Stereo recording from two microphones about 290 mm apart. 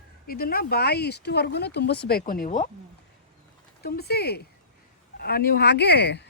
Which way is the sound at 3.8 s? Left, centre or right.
Left.